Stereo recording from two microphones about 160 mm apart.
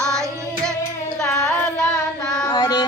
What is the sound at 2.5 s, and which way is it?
Mantra, 25° left (ahead or behind).